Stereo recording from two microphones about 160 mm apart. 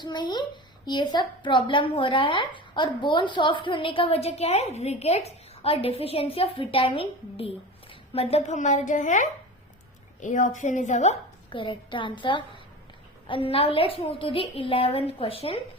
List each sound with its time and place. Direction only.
0.0 s a child's voice: 30° left (ahead or behind); by 11.2 s 45° left (ahead or behind)
11.5 s speech: 30° left (ahead or behind)